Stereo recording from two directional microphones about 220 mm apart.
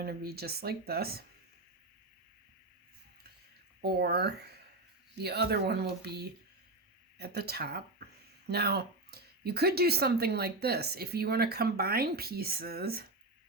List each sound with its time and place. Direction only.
0.0 s speech: 45° right (ahead or behind)
3.8 s speech: 45° right (ahead or behind)